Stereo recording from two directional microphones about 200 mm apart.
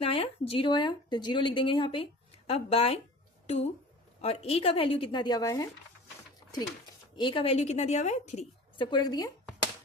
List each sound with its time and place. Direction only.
0.0 s a woman's voice: 25° left (ahead or behind)
7.2 s a woman's voice: 25° left (ahead or behind)
8.9 s a woman's voice: 20° left (ahead or behind)